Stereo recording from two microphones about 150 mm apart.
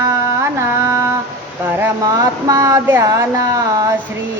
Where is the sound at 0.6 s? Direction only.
15° right (ahead or behind).